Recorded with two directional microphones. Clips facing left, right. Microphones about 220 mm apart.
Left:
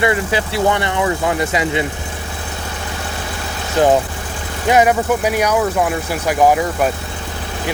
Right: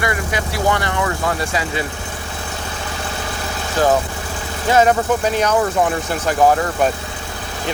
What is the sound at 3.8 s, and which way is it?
Speech, 20° left (ahead or behind).